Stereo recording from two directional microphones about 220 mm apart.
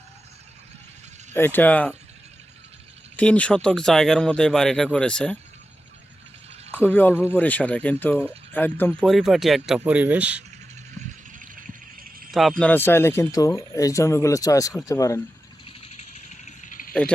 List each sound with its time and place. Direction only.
1.3 s speech: 10° left (ahead or behind)
3.2 s speech: 5° left (ahead or behind)
6.7 s speech: 10° left (ahead or behind)
11.3 s a sound: 40° right (ahead or behind)
12.3 s speech: centre (ahead or behind)
15.6 s vehicle: 25° left (ahead or behind)
16.5 s cricket: 35° left (ahead or behind)